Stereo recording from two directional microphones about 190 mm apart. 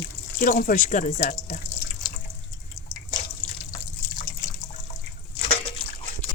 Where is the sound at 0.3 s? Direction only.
50° left (ahead or behind).